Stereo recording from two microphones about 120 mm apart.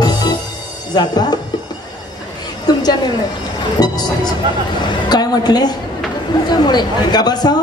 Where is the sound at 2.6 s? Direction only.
35° left (ahead or behind).